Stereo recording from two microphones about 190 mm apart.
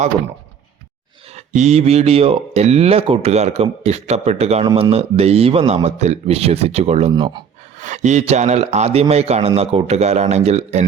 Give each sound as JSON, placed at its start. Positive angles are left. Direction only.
{"t": 1.4, "sound": "speech", "side_deg": -35}
{"t": 7.8, "sound": "speech", "side_deg": -40}